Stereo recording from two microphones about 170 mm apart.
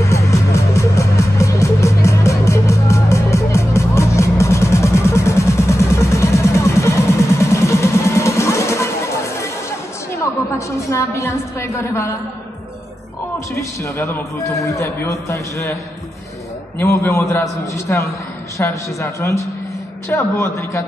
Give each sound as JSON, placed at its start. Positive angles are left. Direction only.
{"t": 0.0, "sound": "music", "side_deg": 20}
{"t": 10.9, "sound": "a sound", "side_deg": 15}
{"t": 13.6, "sound": "a man's voice", "side_deg": 15}